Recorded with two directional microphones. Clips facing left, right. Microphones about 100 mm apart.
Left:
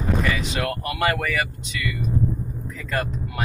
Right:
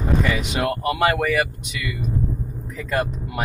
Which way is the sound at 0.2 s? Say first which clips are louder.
Right 2 dB; 20° right (ahead or behind).